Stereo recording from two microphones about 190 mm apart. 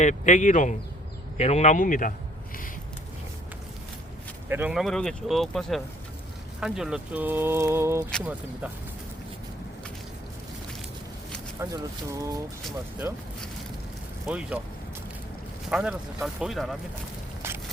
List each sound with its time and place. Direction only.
0.0 s speech: 40° left (ahead or behind)
4.4 s speech: 10° right (ahead or behind)
11.6 s speech: 15° right (ahead or behind)
14.3 s speech: 5° right (ahead or behind)
15.7 s speech: 5° right (ahead or behind)